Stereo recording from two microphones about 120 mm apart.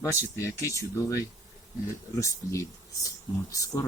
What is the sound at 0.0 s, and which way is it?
Speech, 25° left (ahead or behind).